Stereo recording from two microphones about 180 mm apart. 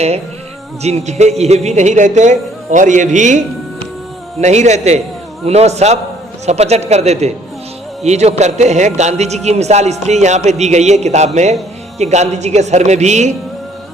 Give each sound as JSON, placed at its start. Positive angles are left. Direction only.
{"t": 0.8, "sound": "a man's voice", "side_deg": -35}